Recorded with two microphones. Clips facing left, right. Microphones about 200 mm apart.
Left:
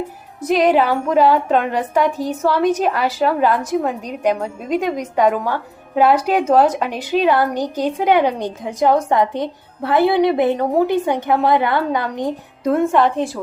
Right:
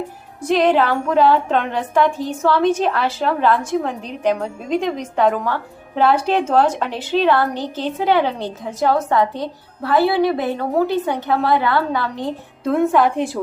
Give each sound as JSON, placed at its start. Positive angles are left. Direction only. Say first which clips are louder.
{"t": 0.4, "sound": "a woman's voice", "louder": "left 1 dB", "side_deg": 10}
{"t": 12.7, "sound": "a woman's voice", "louder": "even", "side_deg": 0}
{"t": 13.1, "sound": "a woman's voice", "louder": "even", "side_deg": -15}